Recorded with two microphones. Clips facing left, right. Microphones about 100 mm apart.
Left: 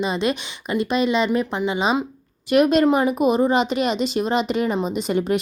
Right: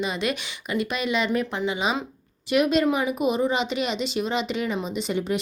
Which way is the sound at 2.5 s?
45° left (ahead or behind).